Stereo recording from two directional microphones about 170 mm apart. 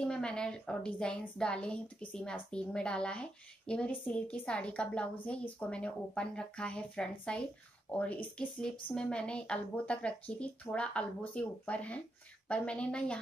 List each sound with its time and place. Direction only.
0.0 s a woman's voice: 5° left (ahead or behind)